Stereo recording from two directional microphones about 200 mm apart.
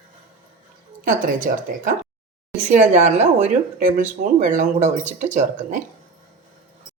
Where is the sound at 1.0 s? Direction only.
40° right (ahead or behind).